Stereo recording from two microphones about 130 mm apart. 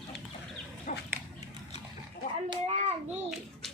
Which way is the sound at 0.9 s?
75° left (ahead or behind).